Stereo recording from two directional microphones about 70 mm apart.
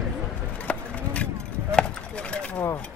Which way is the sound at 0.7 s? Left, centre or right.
Centre.